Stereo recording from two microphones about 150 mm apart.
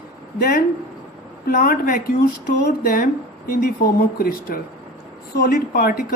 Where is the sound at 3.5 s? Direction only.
75° left (ahead or behind); by 6.0 s 90° left.